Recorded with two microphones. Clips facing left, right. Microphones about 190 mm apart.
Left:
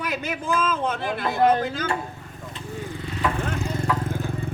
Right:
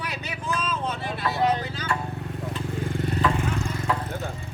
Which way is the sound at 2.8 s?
90° right.